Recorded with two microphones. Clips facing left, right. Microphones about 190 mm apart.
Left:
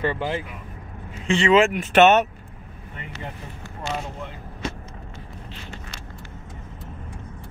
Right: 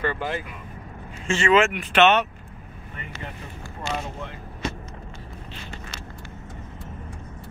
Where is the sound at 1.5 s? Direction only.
35° left (ahead or behind).